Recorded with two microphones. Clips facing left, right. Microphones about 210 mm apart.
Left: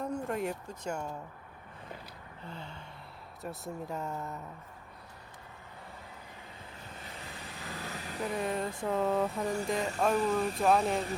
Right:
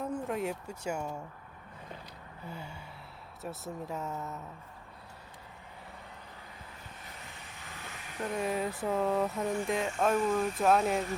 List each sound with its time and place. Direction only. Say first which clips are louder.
0.0 s speech: even; centre (ahead or behind)
2.4 s gasp: right 1 dB; 10° right (ahead or behind)
3.4 s speech: even; centre (ahead or behind)
7.3 s vehicle: left 6 dB; 35° left (ahead or behind)
8.2 s speech: right 1 dB; centre (ahead or behind)